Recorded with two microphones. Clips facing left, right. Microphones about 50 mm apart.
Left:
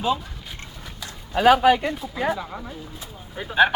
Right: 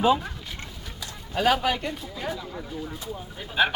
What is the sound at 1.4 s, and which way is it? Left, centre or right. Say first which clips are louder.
Speech: left 7 dB; centre.